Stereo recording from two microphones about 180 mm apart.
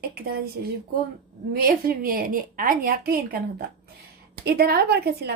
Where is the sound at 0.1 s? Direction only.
60° right (ahead or behind).